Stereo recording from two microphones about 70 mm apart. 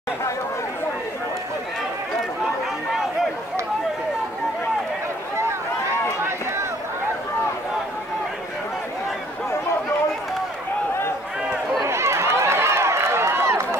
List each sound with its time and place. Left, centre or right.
6.2 s run: right
11.8 s run: right